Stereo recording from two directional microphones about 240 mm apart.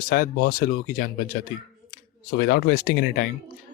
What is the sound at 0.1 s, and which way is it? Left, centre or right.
Speech, left.